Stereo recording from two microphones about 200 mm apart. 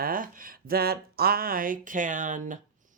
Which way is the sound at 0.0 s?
45° right (ahead or behind).